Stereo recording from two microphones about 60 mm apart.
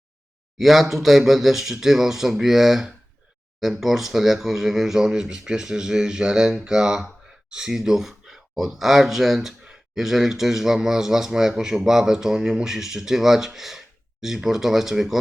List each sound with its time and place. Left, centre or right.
0.6 s speech: centre